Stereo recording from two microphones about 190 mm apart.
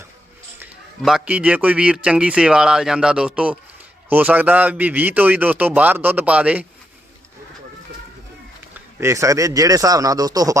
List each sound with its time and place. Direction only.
0.6 s a man's voice: 5° right (ahead or behind)
9.0 s a man's voice: 15° right (ahead or behind)